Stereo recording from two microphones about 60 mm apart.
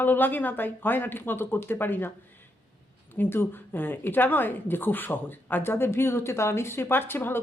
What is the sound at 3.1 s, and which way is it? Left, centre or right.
Speech, left.